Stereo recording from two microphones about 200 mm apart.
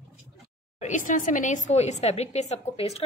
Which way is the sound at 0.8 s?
40° left (ahead or behind).